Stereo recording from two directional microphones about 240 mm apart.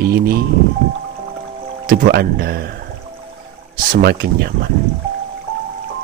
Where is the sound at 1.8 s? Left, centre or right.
Right.